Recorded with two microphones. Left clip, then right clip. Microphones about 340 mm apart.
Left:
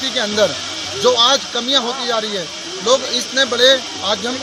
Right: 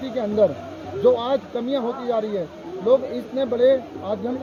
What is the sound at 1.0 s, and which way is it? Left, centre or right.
Speech, left.